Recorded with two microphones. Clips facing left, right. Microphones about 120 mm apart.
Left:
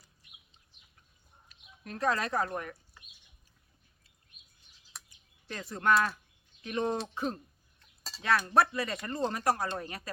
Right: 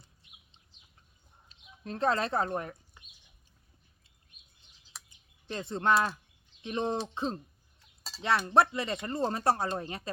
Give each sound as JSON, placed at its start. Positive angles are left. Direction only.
{"t": 0.0, "sound": "bird", "side_deg": -25}
{"t": 1.5, "sound": "speech", "side_deg": -30}
{"t": 4.9, "sound": "bird", "side_deg": 0}
{"t": 5.5, "sound": "speech", "side_deg": -25}
{"t": 7.8, "sound": "a sound", "side_deg": 0}
{"t": 8.2, "sound": "speech", "side_deg": -25}